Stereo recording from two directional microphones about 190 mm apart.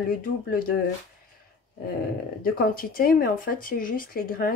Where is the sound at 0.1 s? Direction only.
50° left (ahead or behind).